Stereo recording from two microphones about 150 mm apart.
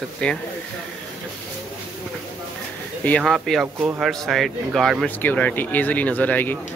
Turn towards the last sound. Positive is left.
turn(degrees=10)  # may be behind; listen again after turning